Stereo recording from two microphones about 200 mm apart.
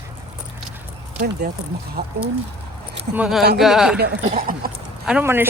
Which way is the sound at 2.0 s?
55° right (ahead or behind).